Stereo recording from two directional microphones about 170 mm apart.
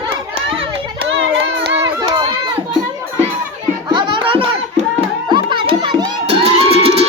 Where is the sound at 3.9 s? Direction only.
30° right (ahead or behind).